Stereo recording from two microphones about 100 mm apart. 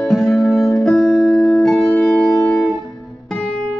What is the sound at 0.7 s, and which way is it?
Music, 5° left (ahead or behind).